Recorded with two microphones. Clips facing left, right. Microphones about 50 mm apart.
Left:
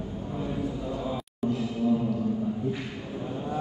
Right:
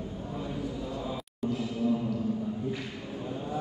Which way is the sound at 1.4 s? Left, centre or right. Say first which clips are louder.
Left 2 dB; left.